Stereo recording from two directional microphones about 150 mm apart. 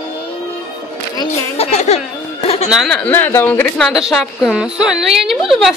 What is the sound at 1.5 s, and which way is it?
Music, 45° left (ahead or behind).